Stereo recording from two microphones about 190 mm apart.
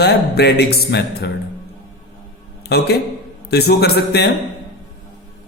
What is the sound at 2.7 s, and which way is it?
A man's voice, 60° left (ahead or behind).